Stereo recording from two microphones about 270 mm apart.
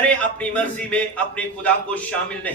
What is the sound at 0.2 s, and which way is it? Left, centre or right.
A man's voice, centre.